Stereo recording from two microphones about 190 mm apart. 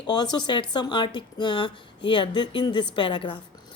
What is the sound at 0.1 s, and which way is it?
Speech, 20° left (ahead or behind).